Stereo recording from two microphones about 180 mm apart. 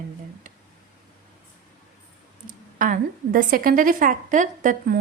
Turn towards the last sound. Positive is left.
turn(degrees=-45)  # may be behind; listen again after turning